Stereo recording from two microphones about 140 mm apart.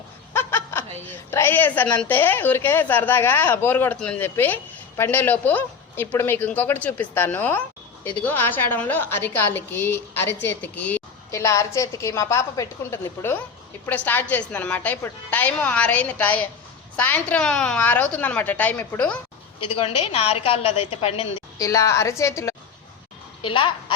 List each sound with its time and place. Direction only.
0.3 s chuckle: 15° left (ahead or behind)
1.0 s a woman's voice: 15° left (ahead or behind)
11.3 s a woman's voice: 20° left (ahead or behind)
20.3 s a woman's voice: 45° left (ahead or behind)
21.6 s a woman's voice: 20° left (ahead or behind)